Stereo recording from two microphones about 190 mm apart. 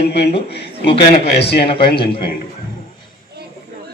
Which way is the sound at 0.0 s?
60° left (ahead or behind).